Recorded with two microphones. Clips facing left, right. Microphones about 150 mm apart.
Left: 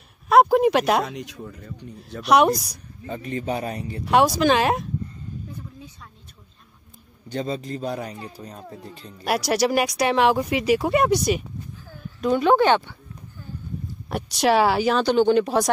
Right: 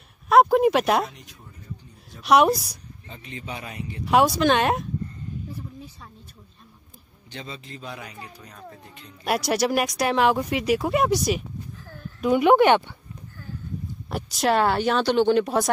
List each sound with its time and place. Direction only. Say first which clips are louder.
0.3 s a sound: left 1 dB; centre (ahead or behind)
1.0 s a man's voice: left 6 dB; 85° left; by 2.2 s 70° left (ahead or behind)
2.2 s speech: even; centre (ahead or behind)
3.1 s speech: left 10 dB; 45° left (ahead or behind)
4.0 s speech: left 1 dB; centre (ahead or behind)
7.2 s speech: left 11 dB; 40° left (ahead or behind)
9.2 s speech: left 2 dB; centre (ahead or behind)
11.9 s a sound: left 1 dB; centre (ahead or behind)
12.3 s speech: right 1 dB; 15° right (ahead or behind)
14.0 s speech: left 3 dB; centre (ahead or behind)